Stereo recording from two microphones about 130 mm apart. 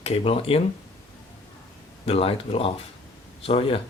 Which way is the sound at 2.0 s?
45° left (ahead or behind).